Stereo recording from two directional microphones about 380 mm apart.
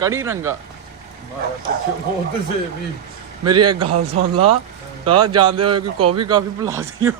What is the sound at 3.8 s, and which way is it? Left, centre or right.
Speech, right.